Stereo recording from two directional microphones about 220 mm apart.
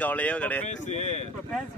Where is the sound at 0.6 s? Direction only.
35° left (ahead or behind).